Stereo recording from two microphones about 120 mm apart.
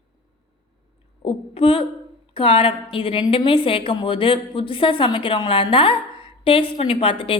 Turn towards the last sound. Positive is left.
turn(degrees=50)  # may be behind; listen again after turning